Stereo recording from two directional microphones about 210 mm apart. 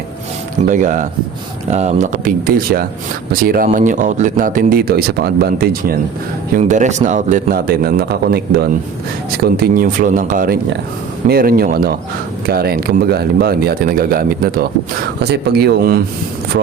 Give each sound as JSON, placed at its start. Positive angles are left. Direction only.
{"t": 0.7, "sound": "a man's voice", "side_deg": -40}
{"t": 6.6, "sound": "a man's voice", "side_deg": -35}